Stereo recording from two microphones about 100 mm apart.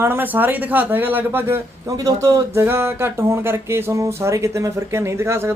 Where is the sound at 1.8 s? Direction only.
35° right (ahead or behind).